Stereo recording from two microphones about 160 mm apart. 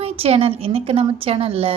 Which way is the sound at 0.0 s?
40° right (ahead or behind).